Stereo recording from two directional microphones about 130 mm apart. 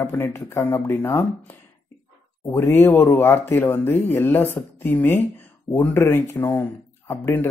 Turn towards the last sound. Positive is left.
turn(degrees=15)  # may be behind; listen again after turning